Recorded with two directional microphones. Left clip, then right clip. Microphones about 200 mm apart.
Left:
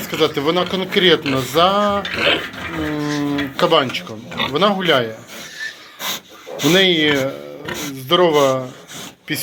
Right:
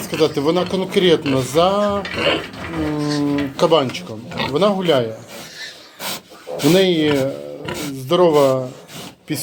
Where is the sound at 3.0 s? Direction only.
5° left (ahead or behind).